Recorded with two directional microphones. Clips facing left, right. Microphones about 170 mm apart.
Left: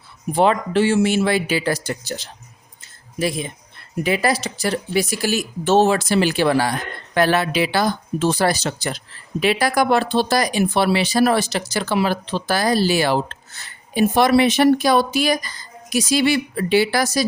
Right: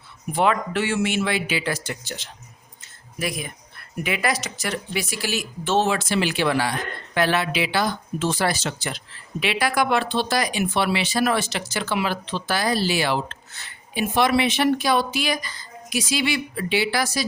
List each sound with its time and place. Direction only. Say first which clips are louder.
0.3 s speech: left 5 dB; 30° left (ahead or behind)